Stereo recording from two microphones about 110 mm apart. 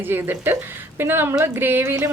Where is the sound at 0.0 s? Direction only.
20° right (ahead or behind).